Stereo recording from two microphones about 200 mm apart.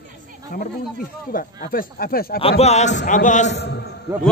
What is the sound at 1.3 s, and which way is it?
A man's voice, 45° left (ahead or behind).